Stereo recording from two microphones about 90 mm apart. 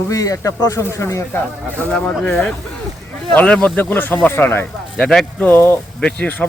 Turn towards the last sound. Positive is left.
turn(degrees=20)  # may be behind; listen again after turning